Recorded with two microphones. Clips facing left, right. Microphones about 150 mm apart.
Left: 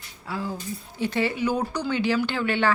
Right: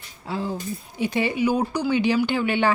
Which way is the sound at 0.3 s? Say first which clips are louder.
Right 3 dB; 25° right (ahead or behind).